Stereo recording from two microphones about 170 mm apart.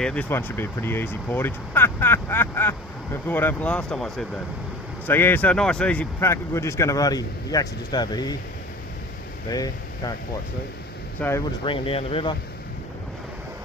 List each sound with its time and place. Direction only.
0.0 s speech: 5° left (ahead or behind); by 8.4 s 25° left (ahead or behind)
9.5 s speech: 20° left (ahead or behind)
11.1 s speech: 15° left (ahead or behind)
11.6 s speech: 30° left (ahead or behind)